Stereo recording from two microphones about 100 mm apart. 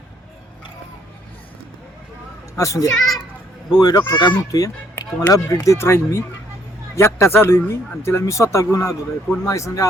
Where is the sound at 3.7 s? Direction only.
40° left (ahead or behind).